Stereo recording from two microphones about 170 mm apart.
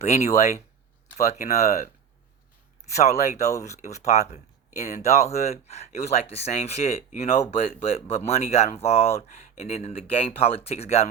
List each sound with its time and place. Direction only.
0.0 s speech: 40° left (ahead or behind)
2.9 s speech: 40° left (ahead or behind)